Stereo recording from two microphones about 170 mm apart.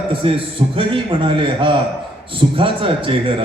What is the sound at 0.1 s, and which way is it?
A man's voice, 30° right (ahead or behind).